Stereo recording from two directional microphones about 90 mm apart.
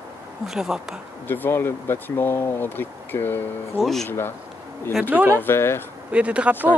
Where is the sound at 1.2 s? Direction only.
20° left (ahead or behind).